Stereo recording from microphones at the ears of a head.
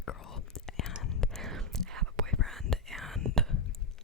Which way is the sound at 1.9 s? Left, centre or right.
Right.